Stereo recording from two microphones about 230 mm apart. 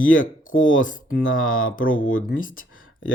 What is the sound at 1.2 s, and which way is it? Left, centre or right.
Speech, left.